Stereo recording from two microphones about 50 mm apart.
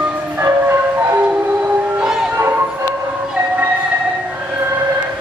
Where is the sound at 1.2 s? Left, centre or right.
Right.